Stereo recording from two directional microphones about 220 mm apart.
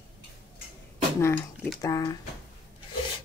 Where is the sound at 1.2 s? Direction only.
10° left (ahead or behind).